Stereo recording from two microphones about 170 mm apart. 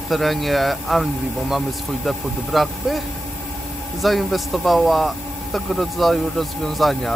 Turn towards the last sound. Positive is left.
turn(degrees=0)  # may be behind; listen again after turning